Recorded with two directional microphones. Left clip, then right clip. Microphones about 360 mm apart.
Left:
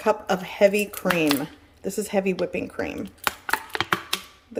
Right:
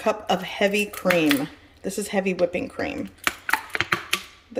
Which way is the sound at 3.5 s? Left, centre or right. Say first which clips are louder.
Right 2 dB; centre.